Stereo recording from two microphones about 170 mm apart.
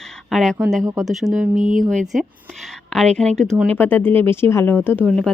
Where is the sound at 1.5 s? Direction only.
50° right (ahead or behind).